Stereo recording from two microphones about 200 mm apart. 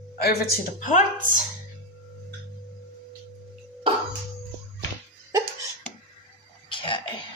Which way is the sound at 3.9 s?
25° right (ahead or behind).